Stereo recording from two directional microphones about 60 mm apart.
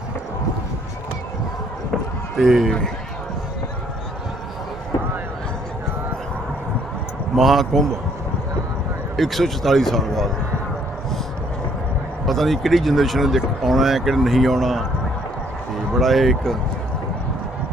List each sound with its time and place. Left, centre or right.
2.3 s speech: centre
7.3 s speech: centre
9.1 s speech: centre
12.2 s speech: centre